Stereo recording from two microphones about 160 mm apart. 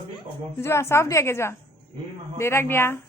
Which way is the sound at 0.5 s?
15° left (ahead or behind).